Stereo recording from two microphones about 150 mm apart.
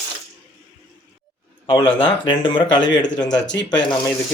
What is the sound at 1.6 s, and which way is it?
Speech, 35° left (ahead or behind).